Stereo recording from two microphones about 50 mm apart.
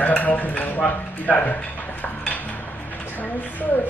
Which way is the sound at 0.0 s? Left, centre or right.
Left.